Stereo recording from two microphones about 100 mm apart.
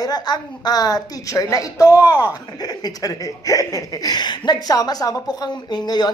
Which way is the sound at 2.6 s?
40° left (ahead or behind).